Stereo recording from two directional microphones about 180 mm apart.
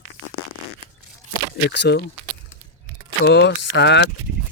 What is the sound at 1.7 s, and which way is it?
Speech, 70° left (ahead or behind).